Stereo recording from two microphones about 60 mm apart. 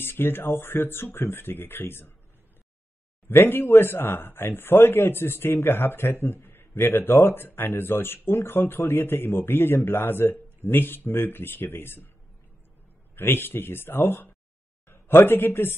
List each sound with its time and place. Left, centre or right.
0.0 s a man's voice: left
3.3 s a man's voice: left
13.1 s a man's voice: left